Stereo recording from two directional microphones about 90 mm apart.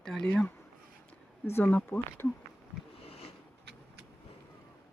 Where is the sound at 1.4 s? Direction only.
25° left (ahead or behind).